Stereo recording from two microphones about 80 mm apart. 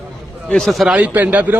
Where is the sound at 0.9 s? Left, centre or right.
Centre.